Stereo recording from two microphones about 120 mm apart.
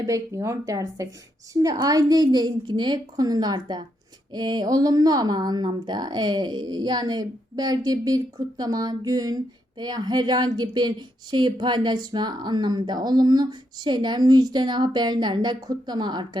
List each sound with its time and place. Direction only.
0.0 s speech: 25° right (ahead or behind)